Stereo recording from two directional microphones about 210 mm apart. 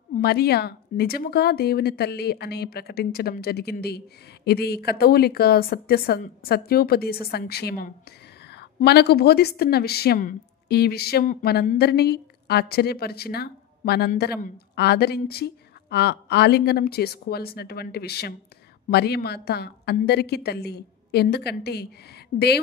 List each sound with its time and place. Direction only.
0.1 s a woman's voice: 50° left (ahead or behind)